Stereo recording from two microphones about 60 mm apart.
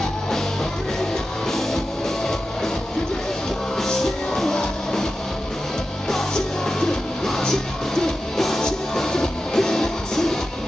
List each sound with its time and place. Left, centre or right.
3.7 s music: centre
6.0 s music: centre